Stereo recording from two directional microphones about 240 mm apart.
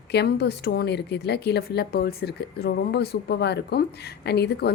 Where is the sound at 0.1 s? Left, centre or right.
Left.